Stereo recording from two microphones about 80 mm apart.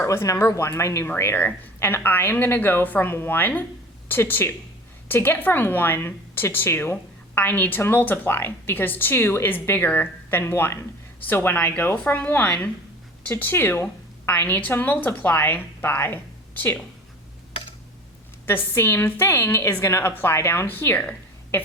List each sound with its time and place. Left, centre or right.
0.0 s a woman's voice: left
18.4 s a woman's voice: left